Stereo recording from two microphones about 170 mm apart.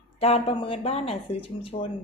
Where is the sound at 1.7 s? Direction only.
45° left (ahead or behind).